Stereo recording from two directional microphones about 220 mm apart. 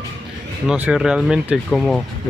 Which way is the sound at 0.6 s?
5° right (ahead or behind).